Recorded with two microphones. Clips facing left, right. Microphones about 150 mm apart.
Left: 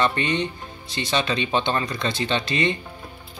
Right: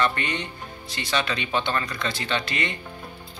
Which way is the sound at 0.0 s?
25° left (ahead or behind).